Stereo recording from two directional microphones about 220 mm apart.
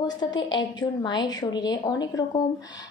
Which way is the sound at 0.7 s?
20° left (ahead or behind).